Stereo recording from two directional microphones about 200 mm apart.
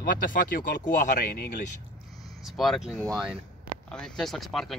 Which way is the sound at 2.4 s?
Centre (ahead or behind).